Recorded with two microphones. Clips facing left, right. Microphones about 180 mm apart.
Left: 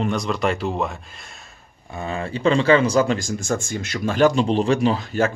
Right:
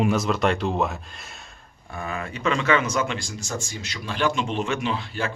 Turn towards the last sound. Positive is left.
turn(degrees=45)  # may be behind; listen again after turning